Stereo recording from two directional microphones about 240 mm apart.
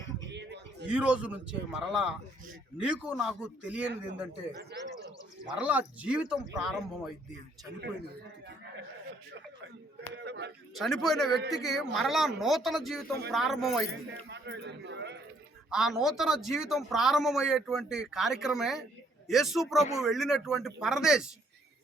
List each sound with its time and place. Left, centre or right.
0.2 s a sound: right
0.9 s a man's voice: centre
4.7 s a man's voice: right
5.5 s a man's voice: centre
10.2 s a sound: right
10.8 s a man's voice: centre
11.3 s a man's voice: right
11.5 s a man's voice: centre
14.3 s a man's voice: right
15.7 s a man's voice: centre